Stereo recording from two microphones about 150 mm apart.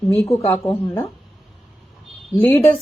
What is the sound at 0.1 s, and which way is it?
Speech, 15° left (ahead or behind).